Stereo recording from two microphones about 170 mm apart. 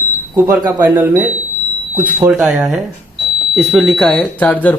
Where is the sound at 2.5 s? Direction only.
Centre (ahead or behind).